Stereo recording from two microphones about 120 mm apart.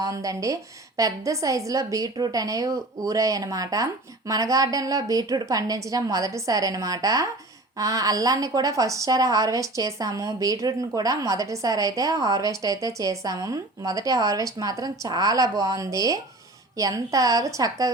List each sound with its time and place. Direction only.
0.0 s a woman's voice: 30° right (ahead or behind)